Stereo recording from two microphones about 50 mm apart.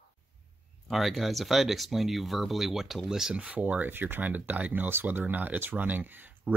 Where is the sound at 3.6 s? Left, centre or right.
Right.